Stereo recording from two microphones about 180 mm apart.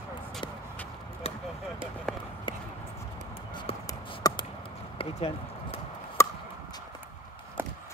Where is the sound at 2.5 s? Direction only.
25° left (ahead or behind).